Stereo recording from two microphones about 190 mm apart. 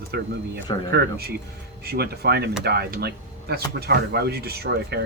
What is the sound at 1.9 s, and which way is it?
Speech, 55° right (ahead or behind).